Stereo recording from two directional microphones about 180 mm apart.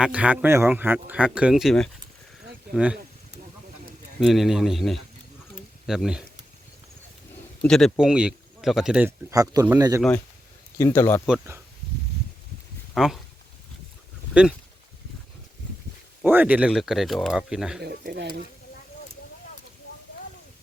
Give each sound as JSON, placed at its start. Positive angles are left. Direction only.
{"t": 0.0, "sound": "speech", "side_deg": -5}
{"t": 4.3, "sound": "speech", "side_deg": 0}
{"t": 7.6, "sound": "speech", "side_deg": 5}
{"t": 9.3, "sound": "speech", "side_deg": -20}
{"t": 10.8, "sound": "speech", "side_deg": 15}
{"t": 12.9, "sound": "speech", "side_deg": 0}
{"t": 14.4, "sound": "speech", "side_deg": -5}
{"t": 16.2, "sound": "speech", "side_deg": -10}
{"t": 17.8, "sound": "speech", "side_deg": -60}